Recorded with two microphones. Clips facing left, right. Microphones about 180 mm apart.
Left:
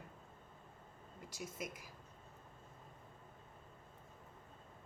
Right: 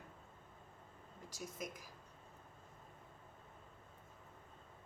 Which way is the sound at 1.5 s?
10° left (ahead or behind).